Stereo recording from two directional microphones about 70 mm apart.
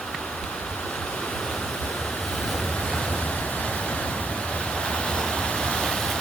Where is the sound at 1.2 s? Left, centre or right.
Centre.